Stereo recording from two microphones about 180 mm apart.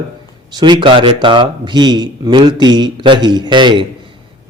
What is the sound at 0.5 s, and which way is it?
A man's voice, 25° right (ahead or behind).